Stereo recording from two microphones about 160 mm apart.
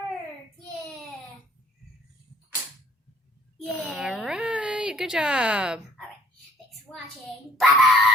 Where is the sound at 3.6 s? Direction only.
Centre (ahead or behind).